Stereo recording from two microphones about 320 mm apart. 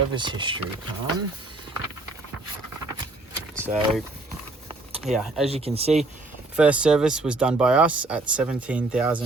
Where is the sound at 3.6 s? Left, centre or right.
Centre.